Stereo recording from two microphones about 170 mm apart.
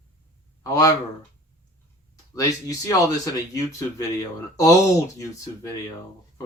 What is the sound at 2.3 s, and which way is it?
Speech, 20° left (ahead or behind).